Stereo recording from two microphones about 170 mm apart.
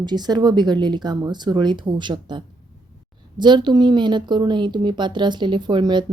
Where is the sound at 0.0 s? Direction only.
25° right (ahead or behind).